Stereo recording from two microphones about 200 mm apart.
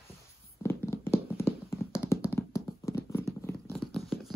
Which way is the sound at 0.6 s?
10° left (ahead or behind).